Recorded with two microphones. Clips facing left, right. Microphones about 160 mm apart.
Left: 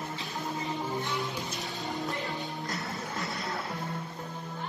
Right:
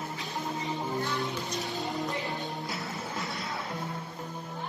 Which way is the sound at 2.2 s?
Centre (ahead or behind).